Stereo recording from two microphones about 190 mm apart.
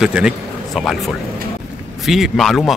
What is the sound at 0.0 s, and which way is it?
A man's voice, 5° right (ahead or behind).